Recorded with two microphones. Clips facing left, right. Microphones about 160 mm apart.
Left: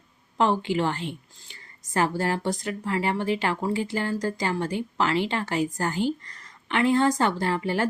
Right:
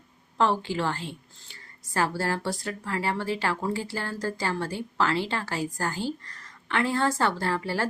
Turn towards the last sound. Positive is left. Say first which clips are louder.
# left 3 dB
turn(degrees=20)  # may be behind; listen again after turning